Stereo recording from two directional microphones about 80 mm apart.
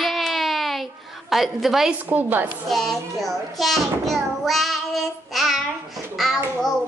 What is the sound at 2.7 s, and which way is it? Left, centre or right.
Child singing, centre.